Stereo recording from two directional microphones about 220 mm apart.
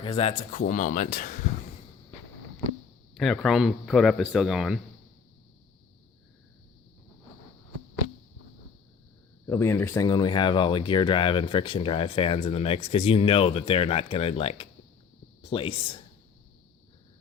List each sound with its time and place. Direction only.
0.0 s speech: 25° left (ahead or behind)
3.2 s speech: centre (ahead or behind)
9.5 s speech: 10° left (ahead or behind); by 14.7 s 25° left (ahead or behind)
15.4 s a sound: 25° left (ahead or behind)